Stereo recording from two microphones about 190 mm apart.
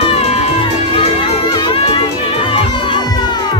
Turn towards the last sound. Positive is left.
turn(degrees=25)  # may be behind; listen again after turning